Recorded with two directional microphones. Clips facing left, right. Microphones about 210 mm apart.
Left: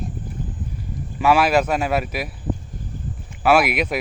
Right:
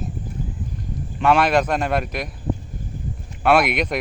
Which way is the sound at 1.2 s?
5° left (ahead or behind).